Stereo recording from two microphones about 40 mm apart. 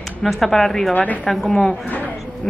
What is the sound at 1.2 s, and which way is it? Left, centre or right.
Speech, centre.